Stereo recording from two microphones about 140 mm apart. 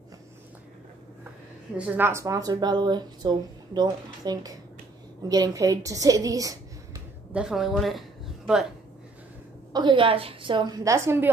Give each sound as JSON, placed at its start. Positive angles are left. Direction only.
{"t": 1.8, "sound": "a woman's voice", "side_deg": -10}
{"t": 7.3, "sound": "a woman's voice", "side_deg": -5}
{"t": 9.7, "sound": "a woman's voice", "side_deg": -30}